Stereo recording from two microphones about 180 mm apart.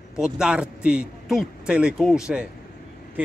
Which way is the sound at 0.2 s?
5° right (ahead or behind).